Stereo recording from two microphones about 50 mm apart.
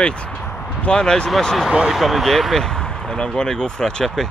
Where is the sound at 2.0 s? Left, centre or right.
Centre.